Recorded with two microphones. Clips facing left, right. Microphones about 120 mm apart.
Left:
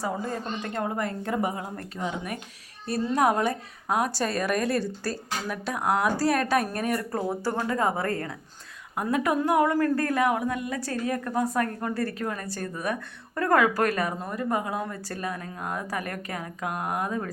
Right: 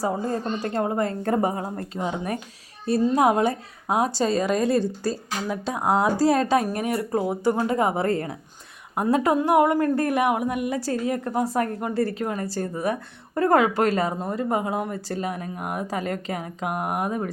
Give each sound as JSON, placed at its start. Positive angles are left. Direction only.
{"t": 0.0, "sound": "a woman's voice", "side_deg": -35}
{"t": 1.2, "sound": "a woman's voice", "side_deg": -40}